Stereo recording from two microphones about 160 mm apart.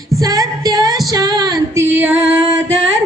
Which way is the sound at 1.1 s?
25° right (ahead or behind).